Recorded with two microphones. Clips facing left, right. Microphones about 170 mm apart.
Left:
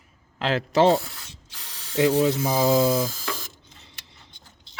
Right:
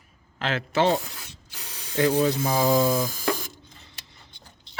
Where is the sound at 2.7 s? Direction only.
20° left (ahead or behind).